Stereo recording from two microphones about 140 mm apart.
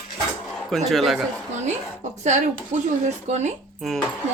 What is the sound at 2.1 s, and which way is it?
Speech, 55° right (ahead or behind).